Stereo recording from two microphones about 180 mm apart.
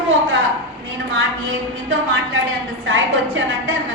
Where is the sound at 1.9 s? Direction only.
90° right.